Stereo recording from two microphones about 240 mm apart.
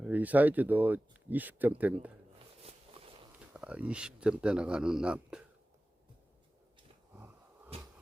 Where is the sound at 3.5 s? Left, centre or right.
Centre.